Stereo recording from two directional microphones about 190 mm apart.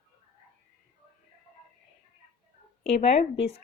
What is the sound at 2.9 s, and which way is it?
Speech, 35° left (ahead or behind).